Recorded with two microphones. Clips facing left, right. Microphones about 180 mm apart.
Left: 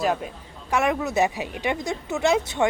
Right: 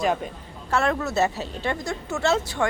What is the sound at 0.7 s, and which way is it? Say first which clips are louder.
Speech: left 1 dB; 15° left (ahead or behind).